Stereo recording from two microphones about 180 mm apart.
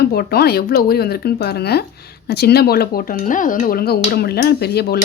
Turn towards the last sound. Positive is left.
turn(degrees=60)  # may be behind; listen again after turning